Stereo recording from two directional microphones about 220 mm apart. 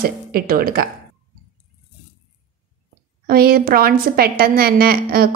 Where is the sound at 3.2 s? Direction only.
40° right (ahead or behind).